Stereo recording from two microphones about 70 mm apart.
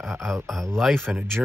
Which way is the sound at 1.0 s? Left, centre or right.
Right.